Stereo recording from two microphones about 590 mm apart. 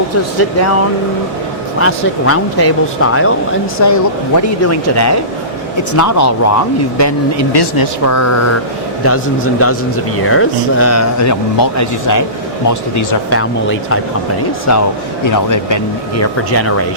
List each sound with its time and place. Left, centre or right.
0.3 s speech: left
1.8 s speech: left
7.5 s speech: left
8.0 s speech: left
10.2 s speech: left